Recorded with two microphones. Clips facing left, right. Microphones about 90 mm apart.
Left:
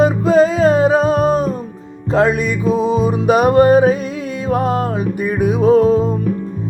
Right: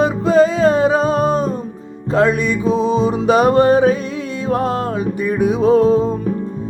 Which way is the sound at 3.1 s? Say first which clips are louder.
Even; 90° right.